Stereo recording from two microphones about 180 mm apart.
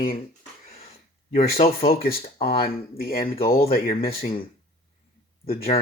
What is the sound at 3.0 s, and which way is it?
Speech, 55° left (ahead or behind).